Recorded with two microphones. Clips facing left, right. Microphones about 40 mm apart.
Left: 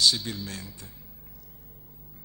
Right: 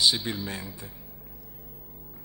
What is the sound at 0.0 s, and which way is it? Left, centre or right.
Speech, centre.